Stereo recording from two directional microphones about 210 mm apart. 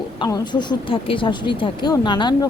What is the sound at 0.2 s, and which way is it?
Speech, 20° left (ahead or behind).